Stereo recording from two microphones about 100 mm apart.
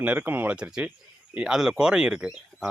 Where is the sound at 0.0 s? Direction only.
15° right (ahead or behind).